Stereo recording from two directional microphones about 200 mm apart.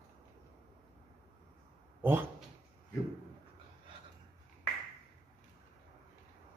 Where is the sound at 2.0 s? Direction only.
10° right (ahead or behind).